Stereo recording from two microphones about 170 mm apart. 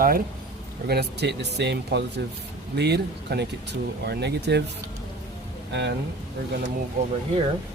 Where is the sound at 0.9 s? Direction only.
75° right (ahead or behind).